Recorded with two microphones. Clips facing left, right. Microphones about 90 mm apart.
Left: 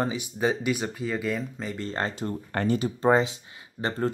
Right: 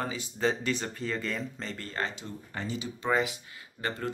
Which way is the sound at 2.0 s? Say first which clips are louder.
Left 7 dB; 50° left (ahead or behind).